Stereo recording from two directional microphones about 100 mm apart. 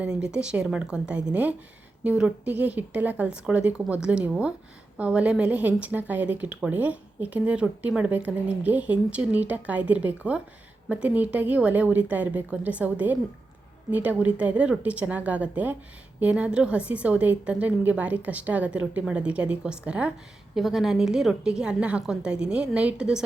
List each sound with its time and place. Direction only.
0.0 s a woman's voice: 10° right (ahead or behind)